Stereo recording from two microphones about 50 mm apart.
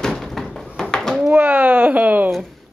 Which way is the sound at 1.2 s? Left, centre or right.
Right.